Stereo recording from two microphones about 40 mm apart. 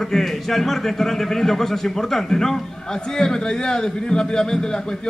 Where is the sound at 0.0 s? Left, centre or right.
Centre.